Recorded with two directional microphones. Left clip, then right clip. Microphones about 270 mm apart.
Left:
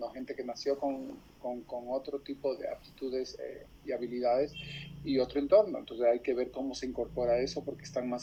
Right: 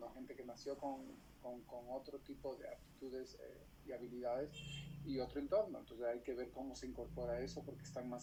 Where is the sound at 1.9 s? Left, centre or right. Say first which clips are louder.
Left 14 dB; left.